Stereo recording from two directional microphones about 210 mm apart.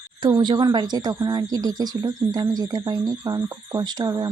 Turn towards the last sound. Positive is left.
turn(degrees=-20)  # may be behind; listen again after turning